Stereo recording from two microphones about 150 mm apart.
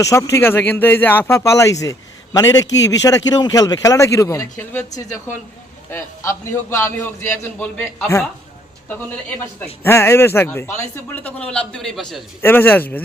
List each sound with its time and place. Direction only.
0.0 s a man's voice: 20° left (ahead or behind)
9.8 s a man's voice: 15° left (ahead or behind); by 12.2 s centre (ahead or behind)
12.4 s a man's voice: 15° left (ahead or behind)